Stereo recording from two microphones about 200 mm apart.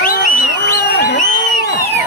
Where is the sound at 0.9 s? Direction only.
60° left (ahead or behind).